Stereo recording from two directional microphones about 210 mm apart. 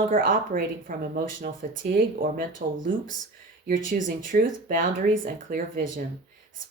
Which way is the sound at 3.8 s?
40° right (ahead or behind).